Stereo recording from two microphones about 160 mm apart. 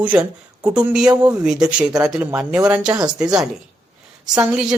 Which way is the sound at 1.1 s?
25° right (ahead or behind).